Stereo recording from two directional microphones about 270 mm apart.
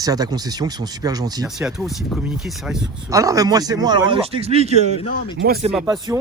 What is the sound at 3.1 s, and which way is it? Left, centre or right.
Speech, centre.